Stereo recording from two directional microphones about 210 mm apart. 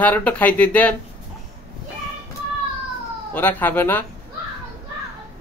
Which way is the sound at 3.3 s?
10° left (ahead or behind).